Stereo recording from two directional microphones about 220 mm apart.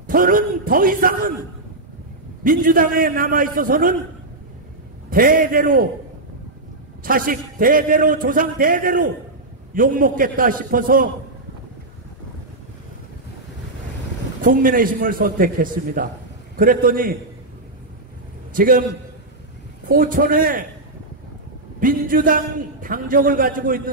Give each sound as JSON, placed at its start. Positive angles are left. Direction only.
{"t": 0.0, "sound": "a sound", "side_deg": -40}
{"t": 2.4, "sound": "a man's voice", "side_deg": -40}
{"t": 5.1, "sound": "a man's voice", "side_deg": -40}
{"t": 7.0, "sound": "a man's voice", "side_deg": -40}
{"t": 14.4, "sound": "a man's voice", "side_deg": -40}
{"t": 18.5, "sound": "a man's voice", "side_deg": -40}
{"t": 19.9, "sound": "a man's voice", "side_deg": -40}
{"t": 21.7, "sound": "a man's voice", "side_deg": -40}